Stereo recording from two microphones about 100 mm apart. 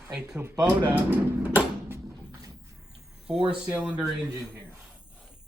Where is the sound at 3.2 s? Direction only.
10° right (ahead or behind).